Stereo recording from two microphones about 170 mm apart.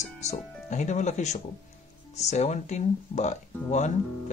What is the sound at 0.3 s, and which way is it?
Speech, 45° left (ahead or behind).